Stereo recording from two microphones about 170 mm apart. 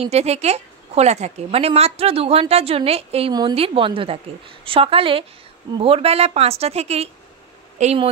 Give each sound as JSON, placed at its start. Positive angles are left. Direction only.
{"t": 0.0, "sound": "a woman's voice", "side_deg": -40}